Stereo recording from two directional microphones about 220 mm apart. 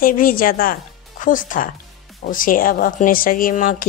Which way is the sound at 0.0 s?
40° left (ahead or behind).